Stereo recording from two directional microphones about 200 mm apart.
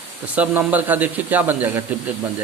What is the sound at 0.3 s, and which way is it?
A man's voice, 10° right (ahead or behind).